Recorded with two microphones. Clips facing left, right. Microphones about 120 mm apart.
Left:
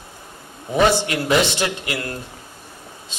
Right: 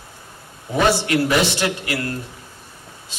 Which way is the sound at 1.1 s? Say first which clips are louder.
Right 1 dB; 20° left (ahead or behind).